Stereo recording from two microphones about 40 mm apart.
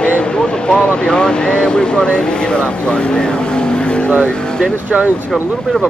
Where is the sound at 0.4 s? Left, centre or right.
Left.